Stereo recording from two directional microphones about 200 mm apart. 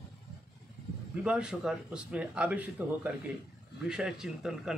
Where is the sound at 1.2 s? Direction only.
5° right (ahead or behind).